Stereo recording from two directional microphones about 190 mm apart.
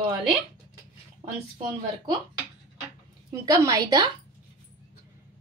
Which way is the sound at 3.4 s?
20° right (ahead or behind).